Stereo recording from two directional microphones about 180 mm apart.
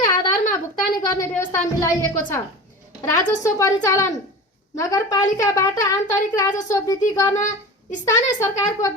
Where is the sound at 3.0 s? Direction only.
20° left (ahead or behind).